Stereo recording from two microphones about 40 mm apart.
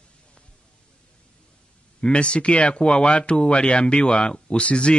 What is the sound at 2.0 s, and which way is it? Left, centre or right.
Speech, left.